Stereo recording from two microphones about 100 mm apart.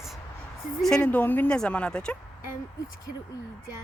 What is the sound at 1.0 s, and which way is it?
Speech, 20° left (ahead or behind).